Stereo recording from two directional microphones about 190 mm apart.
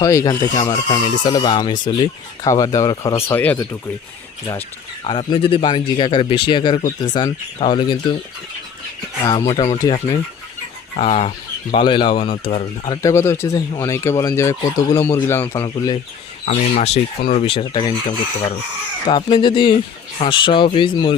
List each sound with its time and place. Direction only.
0.0 s speech: 15° left (ahead or behind)
5.0 s speech: 30° left (ahead or behind)
9.2 s speech: 20° left (ahead or behind)
10.9 s speech: 35° left (ahead or behind)
12.9 s speech: 15° left (ahead or behind)
16.5 s speech: 35° left (ahead or behind)
19.0 s speech: 25° left (ahead or behind)